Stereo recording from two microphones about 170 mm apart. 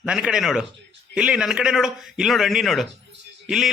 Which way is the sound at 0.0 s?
5° right (ahead or behind).